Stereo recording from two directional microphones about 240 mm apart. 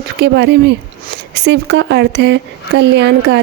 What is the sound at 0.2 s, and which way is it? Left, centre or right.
Speech, right.